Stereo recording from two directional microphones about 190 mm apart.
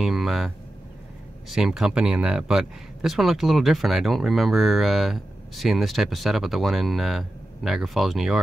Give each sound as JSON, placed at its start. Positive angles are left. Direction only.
{"t": 0.0, "sound": "speech", "side_deg": 0}
{"t": 1.5, "sound": "speech", "side_deg": -5}